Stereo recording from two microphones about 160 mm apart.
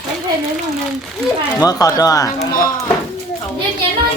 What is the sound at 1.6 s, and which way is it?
Speech, 20° left (ahead or behind).